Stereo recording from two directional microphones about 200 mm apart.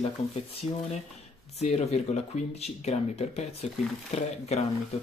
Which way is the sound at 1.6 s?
35° left (ahead or behind).